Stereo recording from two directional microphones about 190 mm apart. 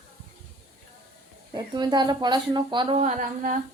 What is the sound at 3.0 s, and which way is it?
Speech, 40° right (ahead or behind).